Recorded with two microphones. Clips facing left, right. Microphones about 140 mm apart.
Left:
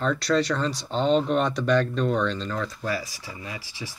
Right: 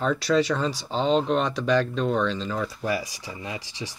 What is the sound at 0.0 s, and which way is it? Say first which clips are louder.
Speech: right 1 dB; 5° right (ahead or behind).